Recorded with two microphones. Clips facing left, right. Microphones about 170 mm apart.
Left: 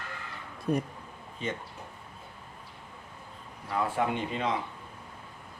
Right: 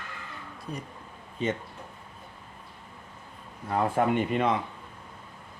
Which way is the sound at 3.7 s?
55° right (ahead or behind).